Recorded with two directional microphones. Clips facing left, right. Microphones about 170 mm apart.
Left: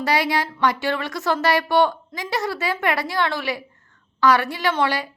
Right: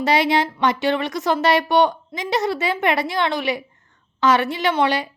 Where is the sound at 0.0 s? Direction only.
20° right (ahead or behind).